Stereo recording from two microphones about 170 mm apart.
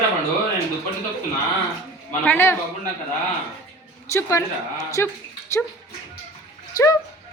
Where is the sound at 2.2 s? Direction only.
10° left (ahead or behind).